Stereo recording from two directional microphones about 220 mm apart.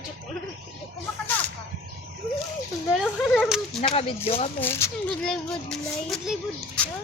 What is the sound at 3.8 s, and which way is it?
Speech, 25° left (ahead or behind).